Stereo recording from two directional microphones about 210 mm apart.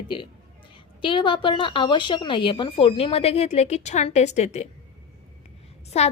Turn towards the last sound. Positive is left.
turn(degrees=30)  # may be behind; listen again after turning